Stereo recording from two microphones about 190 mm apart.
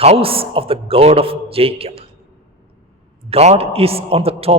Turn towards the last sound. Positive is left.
turn(degrees=-30)  # may be behind; listen again after turning